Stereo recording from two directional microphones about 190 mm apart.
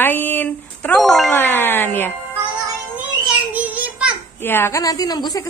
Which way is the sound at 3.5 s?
10° right (ahead or behind).